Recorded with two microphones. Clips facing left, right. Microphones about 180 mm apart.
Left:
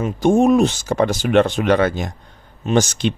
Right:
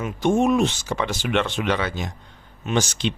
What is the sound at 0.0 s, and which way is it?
Speech, 35° left (ahead or behind).